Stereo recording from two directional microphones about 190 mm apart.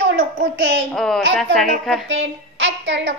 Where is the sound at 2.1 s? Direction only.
70° right (ahead or behind).